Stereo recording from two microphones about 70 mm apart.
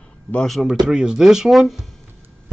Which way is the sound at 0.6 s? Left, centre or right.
Centre.